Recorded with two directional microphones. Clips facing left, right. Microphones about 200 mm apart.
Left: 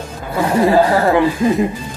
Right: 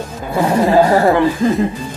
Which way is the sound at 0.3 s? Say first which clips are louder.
Even; 20° right (ahead or behind).